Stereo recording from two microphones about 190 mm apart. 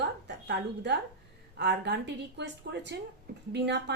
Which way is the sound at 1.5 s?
65° right (ahead or behind).